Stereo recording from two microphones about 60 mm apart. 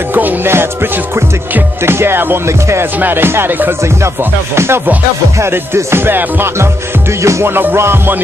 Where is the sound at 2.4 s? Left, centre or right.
Right.